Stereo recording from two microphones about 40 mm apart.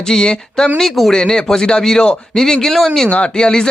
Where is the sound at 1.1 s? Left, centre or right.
Centre.